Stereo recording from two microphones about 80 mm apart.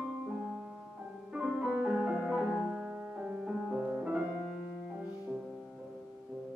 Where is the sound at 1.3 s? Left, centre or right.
Centre.